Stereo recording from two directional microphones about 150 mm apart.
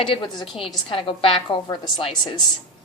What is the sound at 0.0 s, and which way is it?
A woman's voice, 35° left (ahead or behind).